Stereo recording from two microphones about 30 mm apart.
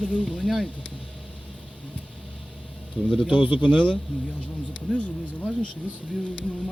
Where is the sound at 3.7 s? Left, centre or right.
Left.